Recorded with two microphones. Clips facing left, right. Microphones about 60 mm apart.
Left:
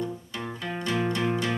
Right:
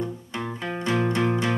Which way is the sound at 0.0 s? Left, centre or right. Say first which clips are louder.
Right 2 dB; right.